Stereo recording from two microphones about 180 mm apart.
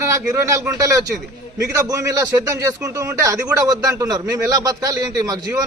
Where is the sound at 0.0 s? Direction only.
15° right (ahead or behind).